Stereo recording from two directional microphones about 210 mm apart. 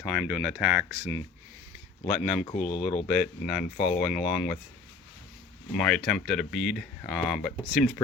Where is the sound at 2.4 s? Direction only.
25° left (ahead or behind).